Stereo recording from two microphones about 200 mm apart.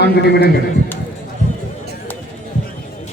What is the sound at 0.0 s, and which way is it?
Speech, 55° left (ahead or behind).